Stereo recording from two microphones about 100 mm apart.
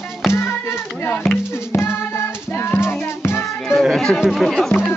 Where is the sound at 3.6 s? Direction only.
Centre (ahead or behind).